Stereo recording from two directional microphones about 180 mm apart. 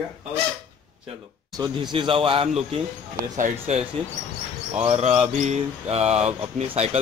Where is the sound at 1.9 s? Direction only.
30° right (ahead or behind).